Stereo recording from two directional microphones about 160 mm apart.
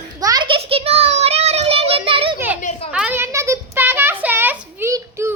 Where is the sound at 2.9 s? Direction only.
5° right (ahead or behind).